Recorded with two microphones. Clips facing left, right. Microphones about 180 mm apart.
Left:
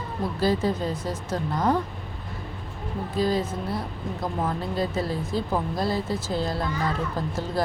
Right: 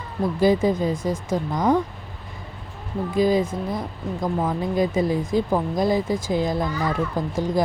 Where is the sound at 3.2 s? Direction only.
15° right (ahead or behind).